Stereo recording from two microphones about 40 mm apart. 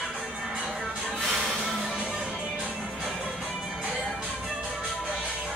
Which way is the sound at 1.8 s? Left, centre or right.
Right.